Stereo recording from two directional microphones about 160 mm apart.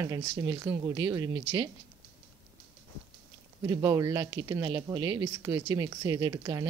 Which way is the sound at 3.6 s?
20° right (ahead or behind).